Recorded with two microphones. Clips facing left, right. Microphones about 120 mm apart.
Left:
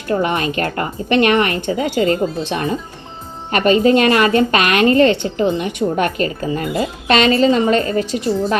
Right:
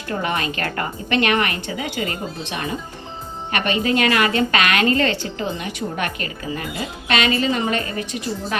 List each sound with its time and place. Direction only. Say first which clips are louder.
0.1 s a woman's voice: left 6 dB; 25° left (ahead or behind)